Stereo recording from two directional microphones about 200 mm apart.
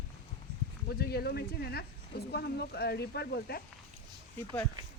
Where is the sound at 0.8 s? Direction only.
50° left (ahead or behind).